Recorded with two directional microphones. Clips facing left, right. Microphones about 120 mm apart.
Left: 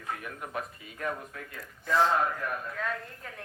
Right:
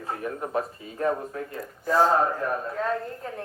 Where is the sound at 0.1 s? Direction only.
35° right (ahead or behind).